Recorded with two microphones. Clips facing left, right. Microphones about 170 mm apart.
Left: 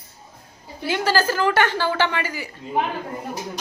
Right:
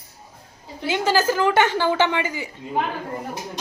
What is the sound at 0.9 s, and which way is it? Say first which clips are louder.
A woman's voice: right 1 dB; 20° right (ahead or behind).